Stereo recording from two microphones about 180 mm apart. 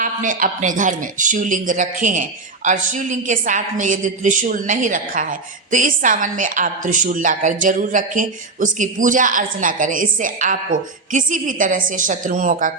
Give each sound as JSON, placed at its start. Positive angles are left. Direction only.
{"t": 0.0, "sound": "a woman's voice", "side_deg": -45}